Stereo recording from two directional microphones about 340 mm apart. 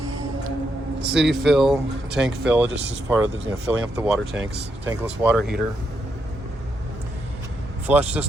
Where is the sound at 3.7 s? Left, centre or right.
Centre.